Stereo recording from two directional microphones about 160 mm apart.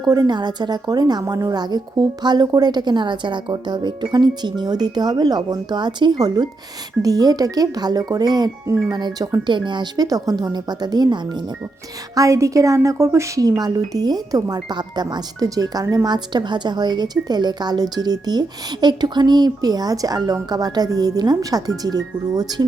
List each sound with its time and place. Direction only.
0.0 s speech: 25° right (ahead or behind)